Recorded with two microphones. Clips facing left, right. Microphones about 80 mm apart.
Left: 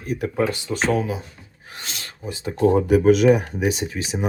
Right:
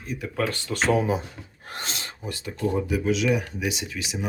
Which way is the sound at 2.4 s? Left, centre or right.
Left.